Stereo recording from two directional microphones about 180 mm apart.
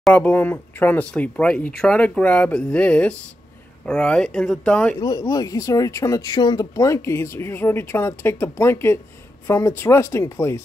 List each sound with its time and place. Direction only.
0.0 s speech: 10° left (ahead or behind)
5.0 s speech: 20° left (ahead or behind)